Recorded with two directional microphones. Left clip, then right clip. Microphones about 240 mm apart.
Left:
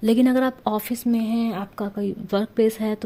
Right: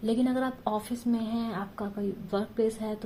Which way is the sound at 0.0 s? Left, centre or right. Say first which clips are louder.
Left 9 dB; left.